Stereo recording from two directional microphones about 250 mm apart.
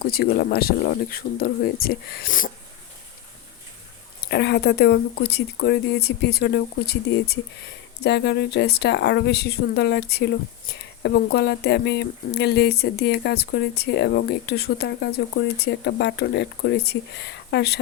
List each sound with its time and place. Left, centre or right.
0.0 s speech: left
4.3 s speech: left